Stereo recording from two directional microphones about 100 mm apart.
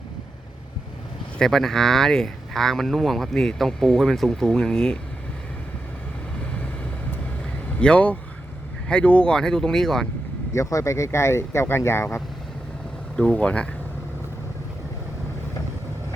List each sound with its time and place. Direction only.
1.4 s speech: 5° left (ahead or behind)
7.8 s speech: 10° left (ahead or behind)
10.5 s speech: 30° left (ahead or behind)
13.1 s speech: 10° left (ahead or behind)